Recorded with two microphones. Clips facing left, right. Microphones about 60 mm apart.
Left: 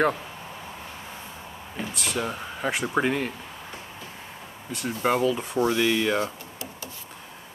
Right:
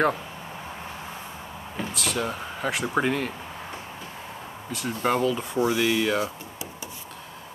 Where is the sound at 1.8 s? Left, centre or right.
Centre.